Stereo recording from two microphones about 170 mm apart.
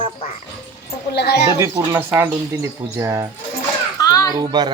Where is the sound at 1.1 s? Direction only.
70° left (ahead or behind).